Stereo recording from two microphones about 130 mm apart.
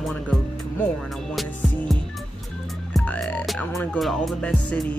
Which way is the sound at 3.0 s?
10° left (ahead or behind).